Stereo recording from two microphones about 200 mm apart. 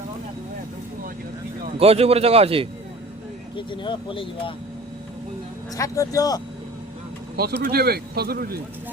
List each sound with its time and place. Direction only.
1.8 s speech: 30° right (ahead or behind)
3.5 s speech: 25° left (ahead or behind)
5.7 s speech: 15° left (ahead or behind)
7.3 s speech: 50° right (ahead or behind)